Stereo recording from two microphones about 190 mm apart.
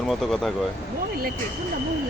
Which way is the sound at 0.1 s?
Centre (ahead or behind).